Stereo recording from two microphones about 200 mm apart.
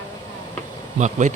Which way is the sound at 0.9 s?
35° right (ahead or behind).